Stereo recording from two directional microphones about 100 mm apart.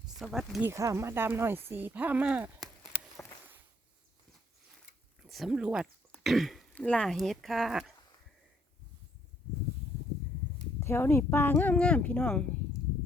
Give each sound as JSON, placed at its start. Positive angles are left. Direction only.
{"t": 0.2, "sound": "speech", "side_deg": 0}
{"t": 0.6, "sound": "speech", "side_deg": -30}
{"t": 5.2, "sound": "speech", "side_deg": 0}
{"t": 10.8, "sound": "speech", "side_deg": 25}